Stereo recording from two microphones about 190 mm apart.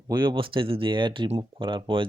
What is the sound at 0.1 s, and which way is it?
Speech, 25° right (ahead or behind).